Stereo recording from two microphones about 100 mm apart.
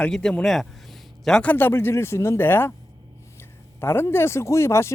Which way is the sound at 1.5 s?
25° left (ahead or behind).